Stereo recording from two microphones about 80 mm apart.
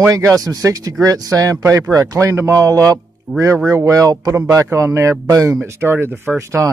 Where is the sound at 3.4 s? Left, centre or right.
Right.